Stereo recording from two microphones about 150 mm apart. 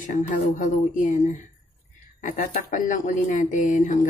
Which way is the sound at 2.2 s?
60° left (ahead or behind).